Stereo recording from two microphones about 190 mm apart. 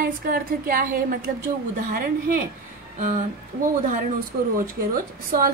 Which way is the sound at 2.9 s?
45° right (ahead or behind).